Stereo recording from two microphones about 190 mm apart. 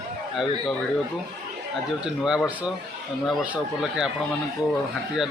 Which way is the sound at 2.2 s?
5° right (ahead or behind).